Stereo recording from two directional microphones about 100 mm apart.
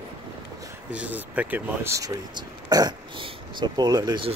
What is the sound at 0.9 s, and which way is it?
Speech, 15° right (ahead or behind).